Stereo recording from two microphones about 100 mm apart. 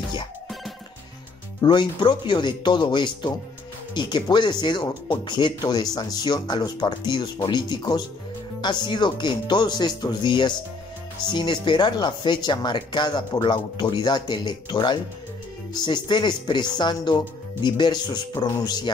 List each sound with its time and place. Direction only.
1.6 s speech: 50° left (ahead or behind)